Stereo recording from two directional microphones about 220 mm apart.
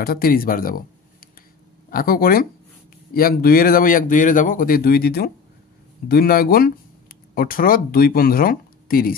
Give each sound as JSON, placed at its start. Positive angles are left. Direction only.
{"t": 0.0, "sound": "speech", "side_deg": 40}